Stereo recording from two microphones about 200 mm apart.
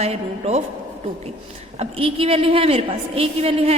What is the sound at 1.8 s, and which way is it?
A woman's voice, 25° right (ahead or behind).